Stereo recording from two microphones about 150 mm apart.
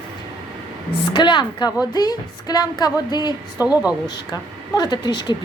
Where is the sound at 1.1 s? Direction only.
30° left (ahead or behind).